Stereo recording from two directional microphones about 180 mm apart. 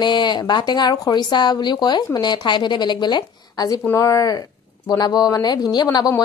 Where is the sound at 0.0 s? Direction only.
25° left (ahead or behind).